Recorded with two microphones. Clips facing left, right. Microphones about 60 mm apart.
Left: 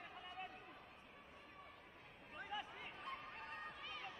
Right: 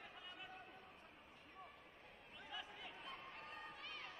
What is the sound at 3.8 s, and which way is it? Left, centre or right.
Run, centre.